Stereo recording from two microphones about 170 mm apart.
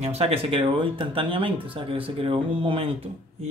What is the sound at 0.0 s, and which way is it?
A man's voice, 40° right (ahead or behind).